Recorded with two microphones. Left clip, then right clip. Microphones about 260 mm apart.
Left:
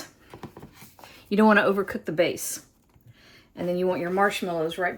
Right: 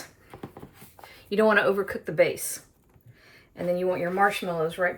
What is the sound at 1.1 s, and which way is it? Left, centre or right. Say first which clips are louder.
Speech: left 1 dB; left.